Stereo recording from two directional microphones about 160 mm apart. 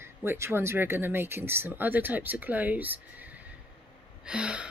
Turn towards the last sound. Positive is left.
turn(degrees=-5)  # may be behind; listen again after turning